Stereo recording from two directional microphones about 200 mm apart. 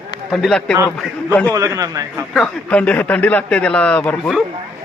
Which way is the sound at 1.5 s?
15° right (ahead or behind).